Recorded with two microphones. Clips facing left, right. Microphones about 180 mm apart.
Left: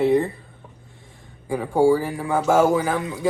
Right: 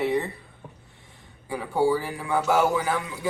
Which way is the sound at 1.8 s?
35° left (ahead or behind).